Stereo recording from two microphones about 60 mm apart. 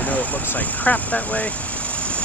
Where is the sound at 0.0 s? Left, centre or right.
Left.